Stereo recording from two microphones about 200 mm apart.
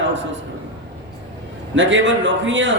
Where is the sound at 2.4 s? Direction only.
65° right (ahead or behind).